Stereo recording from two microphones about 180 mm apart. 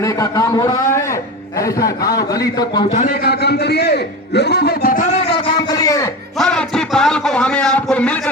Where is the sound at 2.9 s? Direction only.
50° left (ahead or behind); by 6.1 s 20° left (ahead or behind).